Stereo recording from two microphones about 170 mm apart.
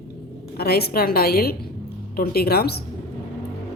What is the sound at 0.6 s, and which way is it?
A woman's voice, 65° left (ahead or behind).